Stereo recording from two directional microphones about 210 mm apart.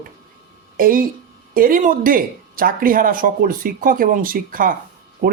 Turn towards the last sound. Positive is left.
turn(degrees=-45)  # may be behind; listen again after turning